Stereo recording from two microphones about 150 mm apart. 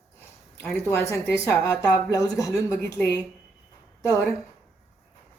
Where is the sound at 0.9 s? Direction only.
15° left (ahead or behind).